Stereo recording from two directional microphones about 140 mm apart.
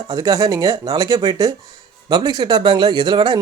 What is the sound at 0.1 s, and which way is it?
Speech, 25° right (ahead or behind).